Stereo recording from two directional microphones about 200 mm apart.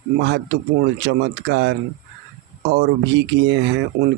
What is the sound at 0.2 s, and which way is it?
Speech, 60° right (ahead or behind).